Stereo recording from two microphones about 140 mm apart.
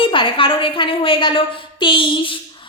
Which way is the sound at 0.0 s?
35° left (ahead or behind).